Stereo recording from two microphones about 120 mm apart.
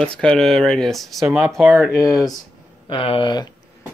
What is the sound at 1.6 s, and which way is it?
Speech, 15° right (ahead or behind).